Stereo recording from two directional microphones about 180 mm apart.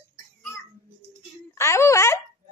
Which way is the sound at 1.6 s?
15° left (ahead or behind).